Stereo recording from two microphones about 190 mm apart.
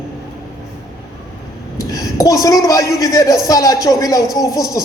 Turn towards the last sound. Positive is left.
turn(degrees=20)  # may be behind; listen again after turning